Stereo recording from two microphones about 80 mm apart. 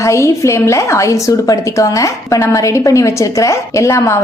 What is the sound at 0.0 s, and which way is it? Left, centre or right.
A woman's voice, left.